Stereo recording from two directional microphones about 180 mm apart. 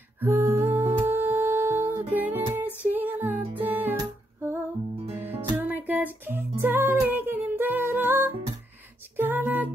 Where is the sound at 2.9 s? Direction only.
10° right (ahead or behind).